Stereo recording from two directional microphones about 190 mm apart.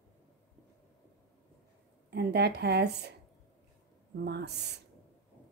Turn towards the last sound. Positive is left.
turn(degrees=-60)  # may be behind; listen again after turning